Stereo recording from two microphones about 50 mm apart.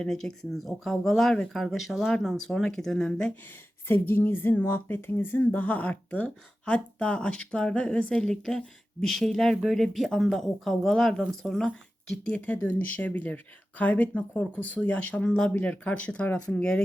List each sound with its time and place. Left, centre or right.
0.0 s speech: centre
3.4 s speech: left; by 11.7 s centre
12.3 s speech: left